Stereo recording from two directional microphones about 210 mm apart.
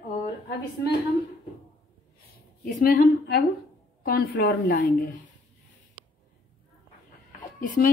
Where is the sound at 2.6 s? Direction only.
40° left (ahead or behind).